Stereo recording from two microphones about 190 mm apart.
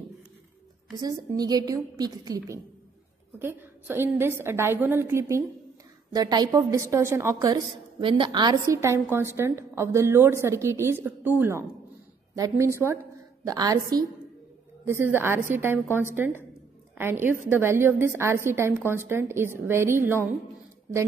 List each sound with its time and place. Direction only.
0.9 s a woman's voice: 20° right (ahead or behind)